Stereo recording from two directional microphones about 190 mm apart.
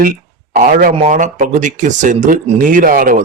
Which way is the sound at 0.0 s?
45° right (ahead or behind).